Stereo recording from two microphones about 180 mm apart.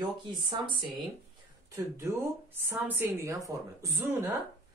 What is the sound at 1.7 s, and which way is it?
A woman's voice, 15° right (ahead or behind).